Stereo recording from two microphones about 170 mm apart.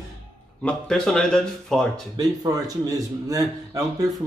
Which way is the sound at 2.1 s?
20° right (ahead or behind).